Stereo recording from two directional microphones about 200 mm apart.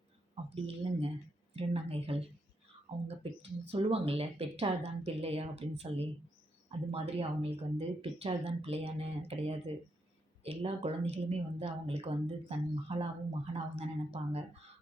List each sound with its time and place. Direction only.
0.5 s a woman's voice: 30° right (ahead or behind)
3.7 s a woman's voice: 30° right (ahead or behind)